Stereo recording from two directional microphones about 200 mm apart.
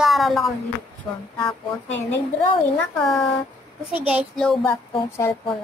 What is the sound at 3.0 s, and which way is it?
Speech, centre (ahead or behind).